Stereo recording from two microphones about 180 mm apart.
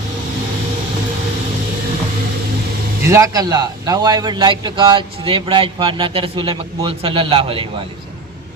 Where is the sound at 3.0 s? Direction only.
15° right (ahead or behind).